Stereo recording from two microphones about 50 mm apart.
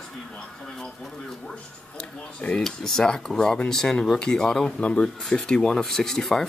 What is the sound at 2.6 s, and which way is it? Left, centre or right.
Speech, centre.